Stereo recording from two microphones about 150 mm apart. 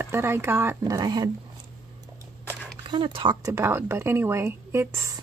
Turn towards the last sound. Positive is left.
turn(degrees=-20)  # may be behind; listen again after turning